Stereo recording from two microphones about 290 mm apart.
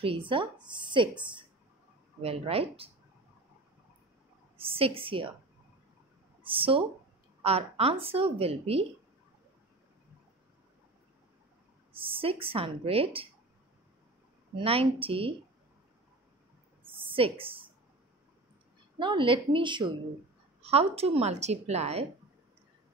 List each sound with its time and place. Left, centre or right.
0.3 s a woman's voice: centre
2.2 s a woman's voice: centre
4.6 s a woman's voice: centre
6.4 s a woman's voice: centre
12.0 s a woman's voice: centre
14.6 s a woman's voice: centre
17.1 s speech: centre
18.9 s a woman's voice: centre